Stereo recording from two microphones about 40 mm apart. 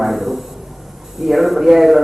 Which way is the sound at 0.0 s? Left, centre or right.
Centre.